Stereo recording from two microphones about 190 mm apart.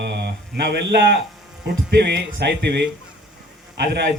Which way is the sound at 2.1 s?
65° right (ahead or behind).